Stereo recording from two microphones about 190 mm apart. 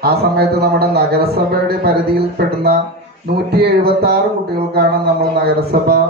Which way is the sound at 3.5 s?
55° right (ahead or behind).